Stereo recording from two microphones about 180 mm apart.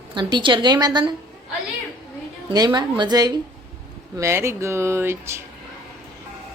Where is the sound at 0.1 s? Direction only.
25° right (ahead or behind).